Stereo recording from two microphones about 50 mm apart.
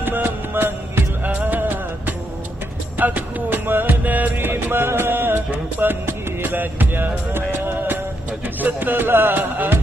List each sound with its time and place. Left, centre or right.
0.0 s music: right
1.3 s music: right
4.4 s music: right